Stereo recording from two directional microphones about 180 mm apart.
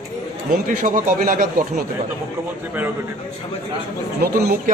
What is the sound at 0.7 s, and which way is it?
Speech, 50° right (ahead or behind).